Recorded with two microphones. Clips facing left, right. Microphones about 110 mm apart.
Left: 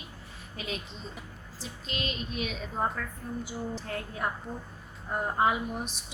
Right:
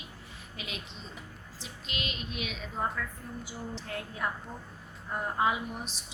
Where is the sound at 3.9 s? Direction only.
40° left (ahead or behind).